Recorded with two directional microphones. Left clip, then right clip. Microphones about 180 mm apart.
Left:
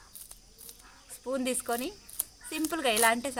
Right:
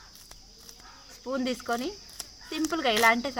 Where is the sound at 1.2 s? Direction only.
15° left (ahead or behind).